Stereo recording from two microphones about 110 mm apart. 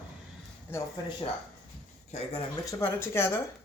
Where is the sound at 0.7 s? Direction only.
20° left (ahead or behind).